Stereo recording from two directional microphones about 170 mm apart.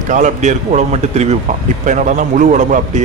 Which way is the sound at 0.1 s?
45° right (ahead or behind).